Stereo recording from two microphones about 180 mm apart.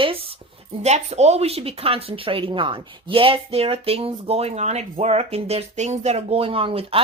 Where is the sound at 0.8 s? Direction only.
35° right (ahead or behind).